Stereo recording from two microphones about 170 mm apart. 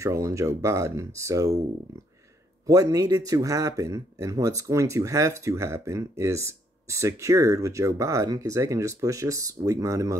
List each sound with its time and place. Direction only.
0.0 s a man's voice: 15° right (ahead or behind)
2.6 s a man's voice: 20° right (ahead or behind)